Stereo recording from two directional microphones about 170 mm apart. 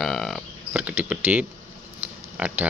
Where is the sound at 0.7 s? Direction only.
10° right (ahead or behind).